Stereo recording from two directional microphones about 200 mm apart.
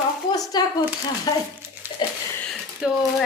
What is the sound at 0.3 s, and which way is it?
Speech, 20° left (ahead or behind).